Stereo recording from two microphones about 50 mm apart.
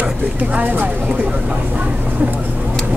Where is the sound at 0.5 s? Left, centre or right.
Right.